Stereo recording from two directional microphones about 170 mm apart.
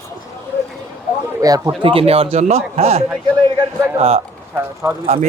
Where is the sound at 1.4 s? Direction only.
20° right (ahead or behind).